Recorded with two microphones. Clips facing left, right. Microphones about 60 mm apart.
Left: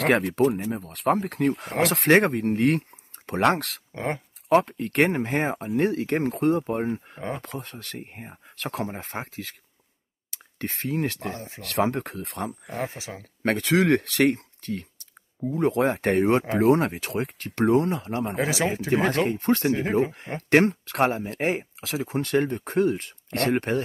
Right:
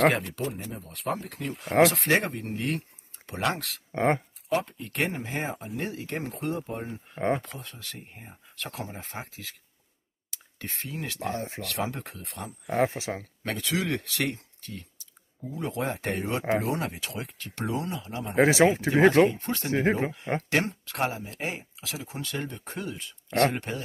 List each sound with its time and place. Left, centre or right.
0.1 s speech: left
3.9 s speech: right
4.5 s speech: left
7.2 s speech: right
7.4 s speech: left
11.3 s speech: right
11.6 s speech: left
12.6 s speech: right
13.2 s speech: left
18.3 s speech: right
19.4 s speech: left
19.7 s speech: right
20.4 s speech: left